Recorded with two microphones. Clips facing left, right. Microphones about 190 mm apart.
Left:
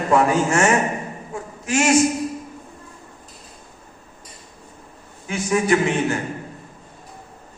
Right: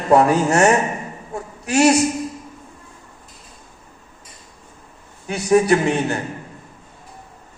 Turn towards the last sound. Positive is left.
turn(degrees=-35)  # may be behind; listen again after turning